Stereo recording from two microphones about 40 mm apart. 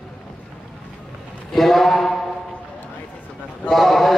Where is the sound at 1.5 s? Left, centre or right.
Centre.